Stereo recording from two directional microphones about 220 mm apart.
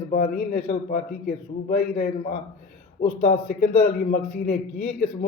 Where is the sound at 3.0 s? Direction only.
35° left (ahead or behind).